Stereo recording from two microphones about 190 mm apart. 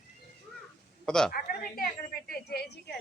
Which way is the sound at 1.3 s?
50° left (ahead or behind).